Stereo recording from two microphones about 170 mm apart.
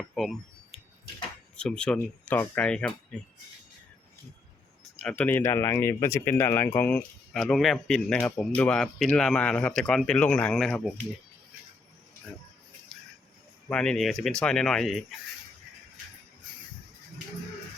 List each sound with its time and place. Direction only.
0.1 s a sound: centre (ahead or behind)
1.5 s speech: 5° left (ahead or behind)
4.9 s speech: 5° left (ahead or behind)
13.7 s speech: 5° left (ahead or behind)